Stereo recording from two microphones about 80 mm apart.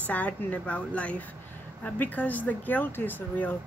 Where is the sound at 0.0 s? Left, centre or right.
Centre.